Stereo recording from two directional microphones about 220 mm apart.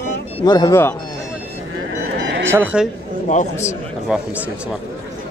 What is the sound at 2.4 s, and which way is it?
Speech, 10° right (ahead or behind).